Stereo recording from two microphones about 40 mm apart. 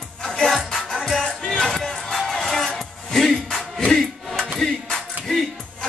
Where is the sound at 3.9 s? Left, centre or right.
Centre.